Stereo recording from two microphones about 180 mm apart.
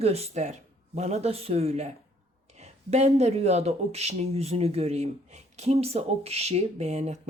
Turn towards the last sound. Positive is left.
turn(degrees=-40)  # may be behind; listen again after turning